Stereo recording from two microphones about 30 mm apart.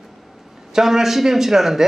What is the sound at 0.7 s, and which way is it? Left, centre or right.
Speech, centre.